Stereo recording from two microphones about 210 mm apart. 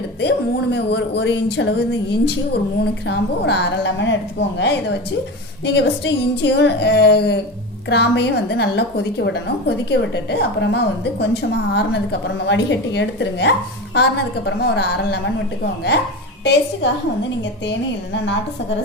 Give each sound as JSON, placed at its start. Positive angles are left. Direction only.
{"t": 0.2, "sound": "a woman's voice", "side_deg": 55}
{"t": 12.5, "sound": "a woman's voice", "side_deg": 55}
{"t": 16.4, "sound": "a woman's voice", "side_deg": 55}